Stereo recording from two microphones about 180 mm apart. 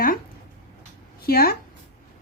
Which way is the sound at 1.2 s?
55° left (ahead or behind).